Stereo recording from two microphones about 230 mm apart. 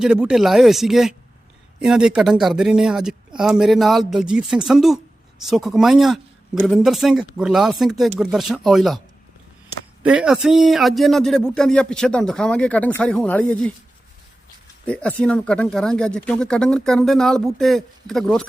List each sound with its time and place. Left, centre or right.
0.0 s a man's voice: centre
10.0 s a man's voice: centre
14.8 s a man's voice: centre